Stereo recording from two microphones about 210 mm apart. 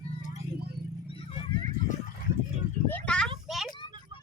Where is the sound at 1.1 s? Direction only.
25° left (ahead or behind).